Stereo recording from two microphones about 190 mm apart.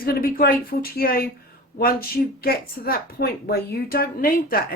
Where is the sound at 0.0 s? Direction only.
50° left (ahead or behind).